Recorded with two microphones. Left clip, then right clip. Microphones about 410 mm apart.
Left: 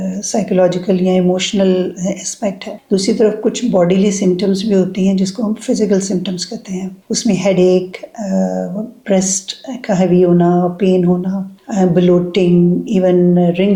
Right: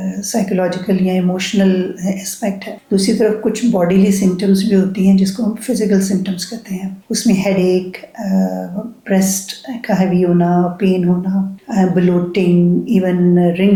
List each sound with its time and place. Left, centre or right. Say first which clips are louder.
0.0 s speech: left 1 dB; left